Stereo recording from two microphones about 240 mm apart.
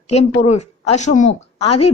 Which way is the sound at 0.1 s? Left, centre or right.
Left.